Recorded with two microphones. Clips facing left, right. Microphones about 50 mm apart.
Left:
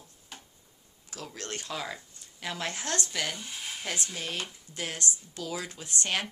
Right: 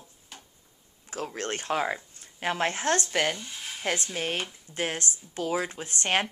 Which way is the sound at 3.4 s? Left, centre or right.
Centre.